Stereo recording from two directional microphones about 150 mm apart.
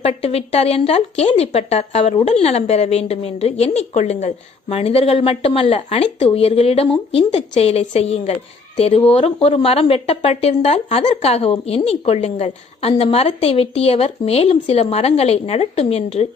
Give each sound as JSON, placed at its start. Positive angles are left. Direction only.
{"t": 0.0, "sound": "a woman's voice", "side_deg": 40}